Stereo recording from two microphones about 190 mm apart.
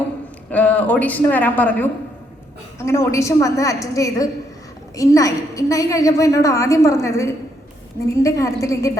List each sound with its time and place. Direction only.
0.5 s a woman's voice: 10° left (ahead or behind)